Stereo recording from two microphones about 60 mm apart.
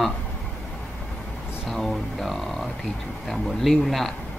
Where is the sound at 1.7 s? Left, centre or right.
Centre.